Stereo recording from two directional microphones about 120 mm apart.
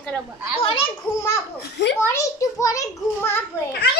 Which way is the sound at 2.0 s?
25° left (ahead or behind).